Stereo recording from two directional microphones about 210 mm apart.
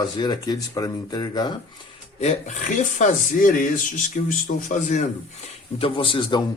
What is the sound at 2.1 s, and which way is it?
Speech, 35° left (ahead or behind).